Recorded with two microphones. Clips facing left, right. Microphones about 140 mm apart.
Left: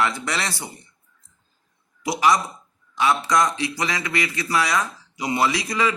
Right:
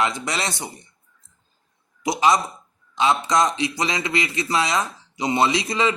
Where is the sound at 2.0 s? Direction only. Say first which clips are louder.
Right 1 dB; 20° right (ahead or behind).